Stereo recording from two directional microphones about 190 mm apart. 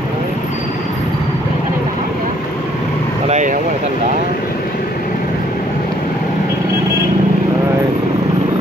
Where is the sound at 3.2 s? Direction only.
40° right (ahead or behind).